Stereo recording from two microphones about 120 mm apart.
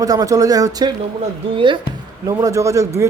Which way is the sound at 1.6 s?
45° right (ahead or behind).